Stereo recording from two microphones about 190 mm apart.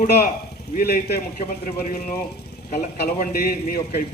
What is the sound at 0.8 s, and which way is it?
A man's voice, 50° left (ahead or behind).